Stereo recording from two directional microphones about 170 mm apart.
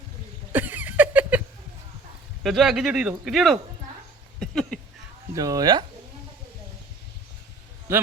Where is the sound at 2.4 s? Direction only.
Centre (ahead or behind).